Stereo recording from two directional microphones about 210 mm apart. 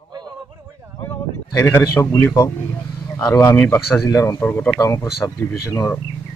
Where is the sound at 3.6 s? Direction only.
5° left (ahead or behind).